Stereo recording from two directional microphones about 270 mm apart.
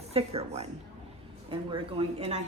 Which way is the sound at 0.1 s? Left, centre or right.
Right.